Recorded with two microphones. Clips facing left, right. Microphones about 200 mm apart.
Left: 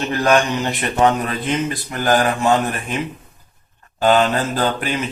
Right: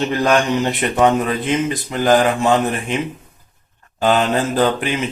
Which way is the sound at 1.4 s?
20° right (ahead or behind).